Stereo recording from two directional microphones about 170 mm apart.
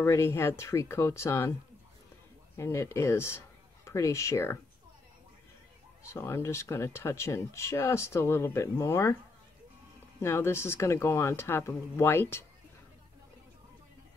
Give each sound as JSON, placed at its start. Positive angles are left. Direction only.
{"t": 0.0, "sound": "speech", "side_deg": 15}
{"t": 2.5, "sound": "speech", "side_deg": 15}
{"t": 6.0, "sound": "speech", "side_deg": 15}
{"t": 10.2, "sound": "speech", "side_deg": 15}